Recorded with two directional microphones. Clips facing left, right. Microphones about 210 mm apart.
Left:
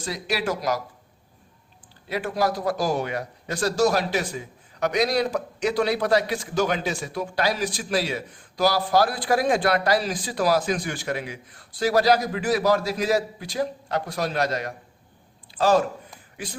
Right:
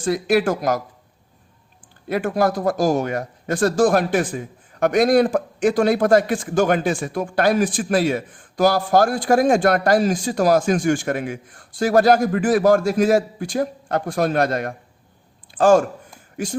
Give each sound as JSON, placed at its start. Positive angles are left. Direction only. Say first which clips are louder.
{"t": 0.0, "sound": "speech", "louder": "right 9 dB", "side_deg": -50}
{"t": 2.0, "sound": "speech", "louder": "right 5 dB", "side_deg": -50}